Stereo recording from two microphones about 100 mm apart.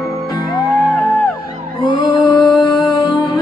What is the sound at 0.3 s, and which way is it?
Music, 45° left (ahead or behind).